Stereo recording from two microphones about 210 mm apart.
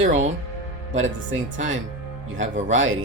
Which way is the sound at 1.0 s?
65° right (ahead or behind).